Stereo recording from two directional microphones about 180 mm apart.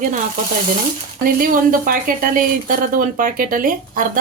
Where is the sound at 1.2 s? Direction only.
50° right (ahead or behind).